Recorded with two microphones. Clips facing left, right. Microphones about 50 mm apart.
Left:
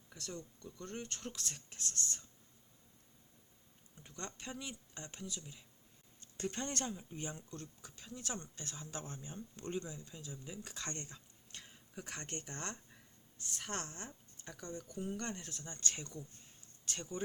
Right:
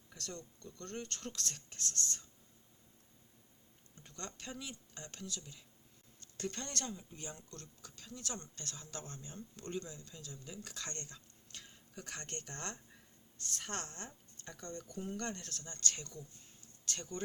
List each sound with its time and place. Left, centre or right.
0.1 s speech: centre
3.9 s a sound: centre
4.3 s speech: centre